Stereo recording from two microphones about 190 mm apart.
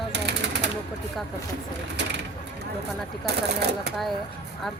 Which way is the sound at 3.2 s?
60° right (ahead or behind).